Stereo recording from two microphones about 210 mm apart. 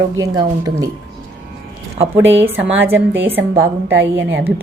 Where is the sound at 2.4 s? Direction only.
10° right (ahead or behind).